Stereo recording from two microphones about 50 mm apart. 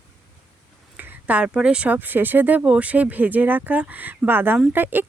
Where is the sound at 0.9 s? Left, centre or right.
Right.